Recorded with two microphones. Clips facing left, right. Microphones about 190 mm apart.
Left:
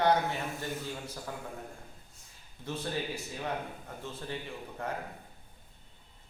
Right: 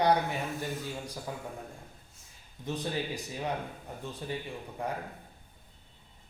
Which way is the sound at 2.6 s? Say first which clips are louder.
Right 2 dB; 15° right (ahead or behind).